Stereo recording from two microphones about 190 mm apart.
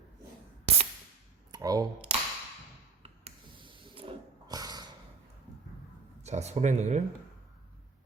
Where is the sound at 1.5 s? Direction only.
20° right (ahead or behind).